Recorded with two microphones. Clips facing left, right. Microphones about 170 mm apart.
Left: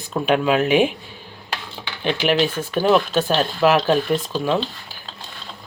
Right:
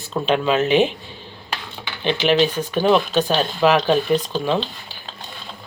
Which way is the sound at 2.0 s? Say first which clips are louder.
Right 2 dB; 5° left (ahead or behind).